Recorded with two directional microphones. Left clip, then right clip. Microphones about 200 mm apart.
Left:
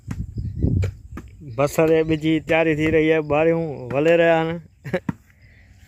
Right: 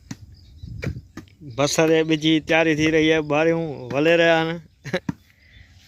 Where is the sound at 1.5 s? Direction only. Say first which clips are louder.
Left 1 dB; 5° right (ahead or behind).